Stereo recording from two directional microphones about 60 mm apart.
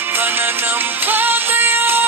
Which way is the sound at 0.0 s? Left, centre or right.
Right.